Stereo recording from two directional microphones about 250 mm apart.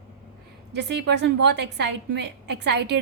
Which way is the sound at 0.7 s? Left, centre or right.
Right.